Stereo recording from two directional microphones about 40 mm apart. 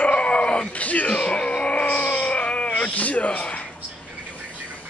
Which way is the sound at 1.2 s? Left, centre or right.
Left.